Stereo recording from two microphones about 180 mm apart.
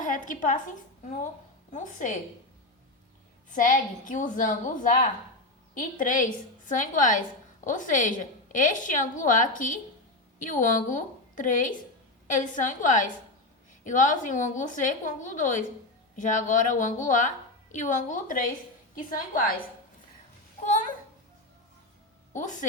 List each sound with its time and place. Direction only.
0.0 s a woman's voice: 45° left (ahead or behind)
1.7 s a woman's voice: 45° left (ahead or behind)
3.5 s a woman's voice: 50° left (ahead or behind)
22.3 s a woman's voice: 45° left (ahead or behind)